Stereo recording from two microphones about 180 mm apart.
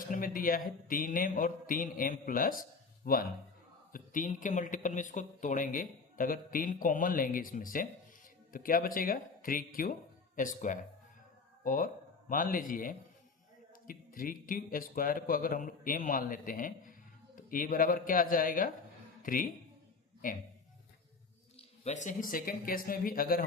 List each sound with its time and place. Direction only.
0.1 s speech: 50° left (ahead or behind)
21.5 s speech: 40° left (ahead or behind)